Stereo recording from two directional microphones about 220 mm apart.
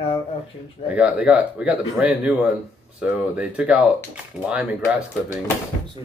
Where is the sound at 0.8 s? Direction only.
5° right (ahead or behind).